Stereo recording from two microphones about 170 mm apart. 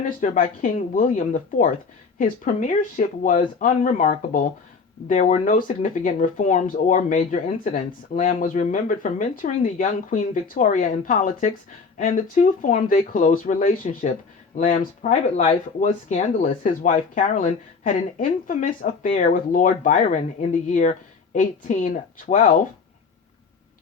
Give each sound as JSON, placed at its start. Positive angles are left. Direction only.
{"t": 0.0, "sound": "speech", "side_deg": 50}